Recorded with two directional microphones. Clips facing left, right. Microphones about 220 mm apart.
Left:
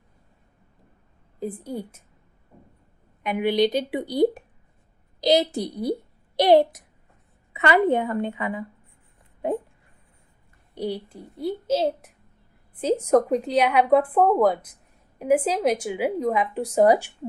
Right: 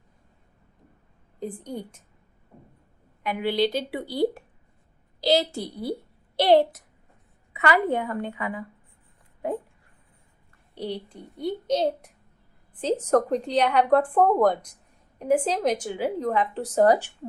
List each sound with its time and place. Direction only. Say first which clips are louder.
1.4 s speech: left 2 dB; 5° left (ahead or behind)
3.2 s a woman's voice: left 3 dB; 15° left (ahead or behind)
10.8 s a child's voice: left 3 dB; 10° left (ahead or behind)